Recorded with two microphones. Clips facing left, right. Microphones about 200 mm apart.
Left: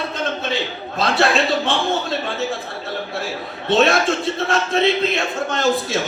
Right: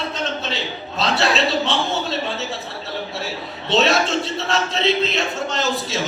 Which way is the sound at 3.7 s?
55° left (ahead or behind).